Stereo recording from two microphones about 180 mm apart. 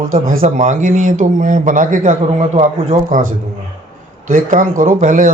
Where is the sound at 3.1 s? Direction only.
45° right (ahead or behind).